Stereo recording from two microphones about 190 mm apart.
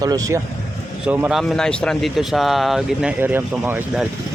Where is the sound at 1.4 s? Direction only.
5° left (ahead or behind).